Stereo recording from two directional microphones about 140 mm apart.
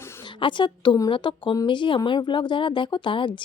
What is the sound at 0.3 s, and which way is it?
A woman's voice, 35° left (ahead or behind).